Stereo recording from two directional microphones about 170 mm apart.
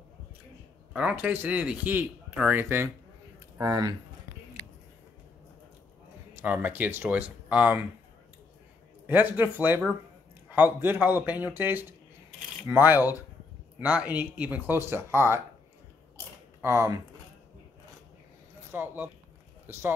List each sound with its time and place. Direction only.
0.9 s speech: 10° right (ahead or behind)
6.4 s speech: 10° right (ahead or behind)
9.0 s speech: 10° right (ahead or behind)
16.6 s speech: 15° right (ahead or behind)
18.7 s speech: 10° right (ahead or behind)